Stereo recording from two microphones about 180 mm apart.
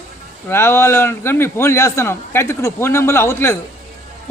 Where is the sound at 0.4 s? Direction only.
15° left (ahead or behind).